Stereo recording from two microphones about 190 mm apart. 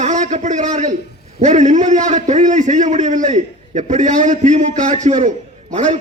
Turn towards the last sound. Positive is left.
turn(degrees=-40)  # may be behind; listen again after turning